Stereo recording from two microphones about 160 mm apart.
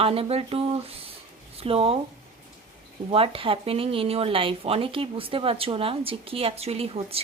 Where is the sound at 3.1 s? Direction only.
35° right (ahead or behind).